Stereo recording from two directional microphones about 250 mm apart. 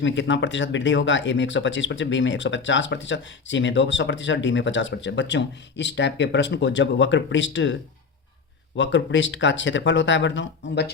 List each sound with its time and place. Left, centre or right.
0.0 s speech: left